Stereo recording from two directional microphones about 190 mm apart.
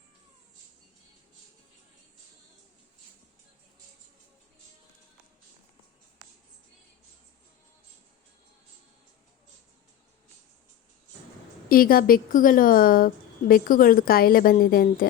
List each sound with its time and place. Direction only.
11.7 s a woman's voice: 50° left (ahead or behind)